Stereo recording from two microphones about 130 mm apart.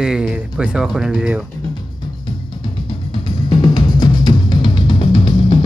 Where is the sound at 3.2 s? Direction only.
35° left (ahead or behind).